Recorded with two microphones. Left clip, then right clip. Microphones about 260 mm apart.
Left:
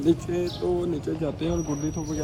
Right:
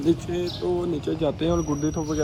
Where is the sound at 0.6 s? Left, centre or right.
Centre.